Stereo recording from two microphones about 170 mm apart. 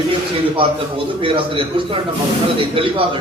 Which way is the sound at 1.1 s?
30° right (ahead or behind).